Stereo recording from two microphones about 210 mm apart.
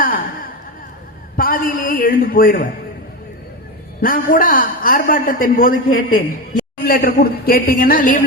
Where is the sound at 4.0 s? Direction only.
40° left (ahead or behind).